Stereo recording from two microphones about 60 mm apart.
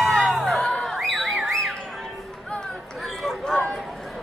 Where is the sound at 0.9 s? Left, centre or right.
Centre.